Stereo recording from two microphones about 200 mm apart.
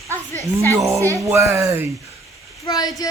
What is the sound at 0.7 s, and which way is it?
Speech, 15° right (ahead or behind).